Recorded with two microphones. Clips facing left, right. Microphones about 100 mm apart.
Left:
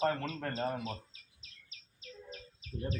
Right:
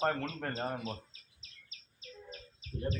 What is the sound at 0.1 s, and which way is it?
Speech, 5° right (ahead or behind).